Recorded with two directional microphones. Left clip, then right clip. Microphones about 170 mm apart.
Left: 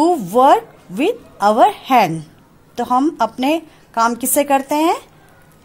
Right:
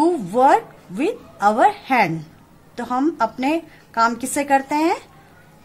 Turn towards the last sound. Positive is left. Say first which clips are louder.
# left 3 dB
turn(degrees=20)  # may be behind; listen again after turning